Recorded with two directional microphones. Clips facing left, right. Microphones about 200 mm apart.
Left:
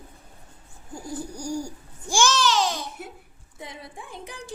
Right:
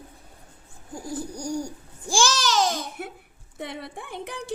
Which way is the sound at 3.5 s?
70° right (ahead or behind).